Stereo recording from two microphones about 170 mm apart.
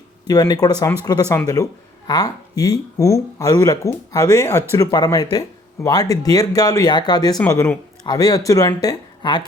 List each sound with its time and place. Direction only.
0.3 s speech: 20° left (ahead or behind)